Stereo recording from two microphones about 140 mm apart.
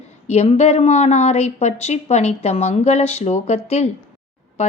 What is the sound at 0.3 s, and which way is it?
A woman's voice, 50° left (ahead or behind).